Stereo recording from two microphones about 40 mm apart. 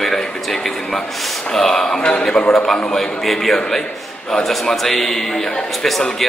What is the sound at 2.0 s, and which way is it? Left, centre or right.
Speech, left.